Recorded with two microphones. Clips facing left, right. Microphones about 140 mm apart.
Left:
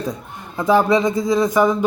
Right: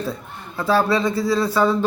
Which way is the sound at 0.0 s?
15° left (ahead or behind).